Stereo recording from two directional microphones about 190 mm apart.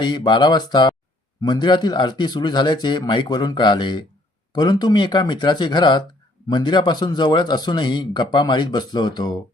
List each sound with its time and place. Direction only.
0.0 s a man's voice: 25° left (ahead or behind)